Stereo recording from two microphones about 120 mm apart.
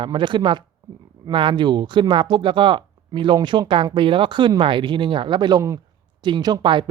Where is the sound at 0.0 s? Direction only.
40° right (ahead or behind).